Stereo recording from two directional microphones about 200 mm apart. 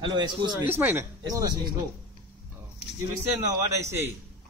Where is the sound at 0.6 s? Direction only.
10° right (ahead or behind).